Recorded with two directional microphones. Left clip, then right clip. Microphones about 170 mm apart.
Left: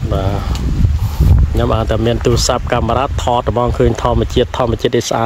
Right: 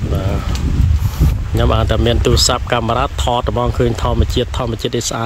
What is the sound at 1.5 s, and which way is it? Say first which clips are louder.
Speech: even; centre (ahead or behind).